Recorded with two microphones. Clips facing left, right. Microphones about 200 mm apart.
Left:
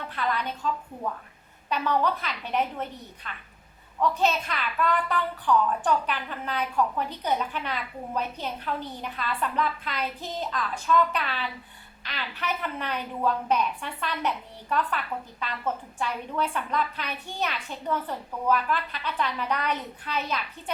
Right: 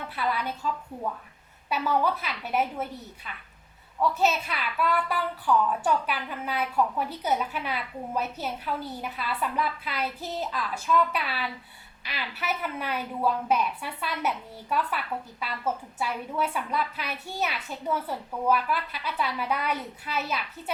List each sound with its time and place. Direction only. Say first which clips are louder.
0.1 s a woman's voice: even; 5° right (ahead or behind)
1.7 s a woman's voice: even; 5° right (ahead or behind)